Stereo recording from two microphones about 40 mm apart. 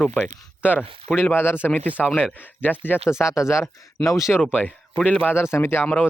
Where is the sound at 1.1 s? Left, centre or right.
Left.